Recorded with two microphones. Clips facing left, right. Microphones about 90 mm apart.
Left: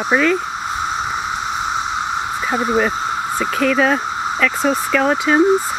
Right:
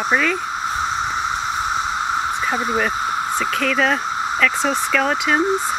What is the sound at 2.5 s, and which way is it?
Speech, 10° left (ahead or behind).